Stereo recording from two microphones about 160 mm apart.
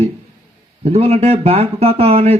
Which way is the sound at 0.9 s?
40° right (ahead or behind).